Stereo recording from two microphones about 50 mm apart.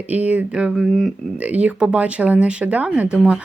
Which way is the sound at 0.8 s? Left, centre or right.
Centre.